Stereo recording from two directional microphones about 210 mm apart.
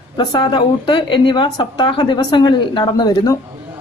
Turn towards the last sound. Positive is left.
turn(degrees=20)  # may be behind; listen again after turning